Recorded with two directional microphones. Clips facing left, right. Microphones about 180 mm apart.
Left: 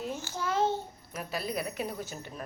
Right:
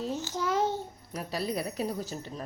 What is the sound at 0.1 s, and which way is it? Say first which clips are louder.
Babbling: right 4 dB; 10° left (ahead or behind).